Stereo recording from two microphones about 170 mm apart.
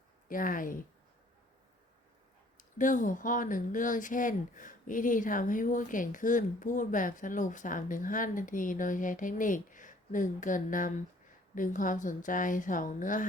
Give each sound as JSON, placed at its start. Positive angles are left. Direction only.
{"t": 0.3, "sound": "speech", "side_deg": 55}
{"t": 2.6, "sound": "speech", "side_deg": 50}